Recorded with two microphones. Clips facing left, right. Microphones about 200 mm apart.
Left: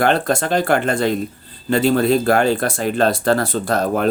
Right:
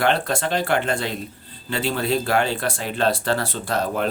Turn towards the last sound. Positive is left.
turn(degrees=45)  # may be behind; listen again after turning